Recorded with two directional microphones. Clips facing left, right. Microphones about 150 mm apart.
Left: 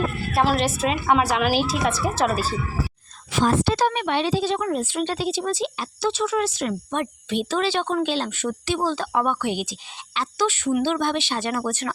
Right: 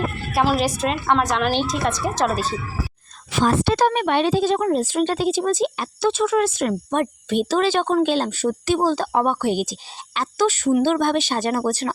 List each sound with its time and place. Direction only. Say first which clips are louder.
0.3 s a woman's voice: right 2 dB; centre (ahead or behind)
3.4 s speech: right 2 dB; 65° right (ahead or behind); by 11.9 s 35° right (ahead or behind)